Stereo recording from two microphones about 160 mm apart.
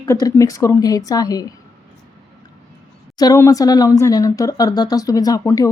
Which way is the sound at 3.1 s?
20° left (ahead or behind).